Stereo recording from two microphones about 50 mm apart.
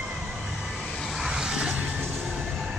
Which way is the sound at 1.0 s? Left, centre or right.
Centre.